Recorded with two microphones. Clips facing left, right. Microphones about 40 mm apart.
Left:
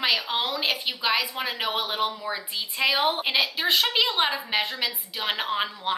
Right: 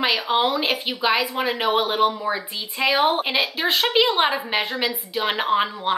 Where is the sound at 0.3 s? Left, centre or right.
Centre.